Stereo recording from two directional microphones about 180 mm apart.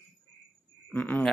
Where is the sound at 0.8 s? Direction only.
10° left (ahead or behind).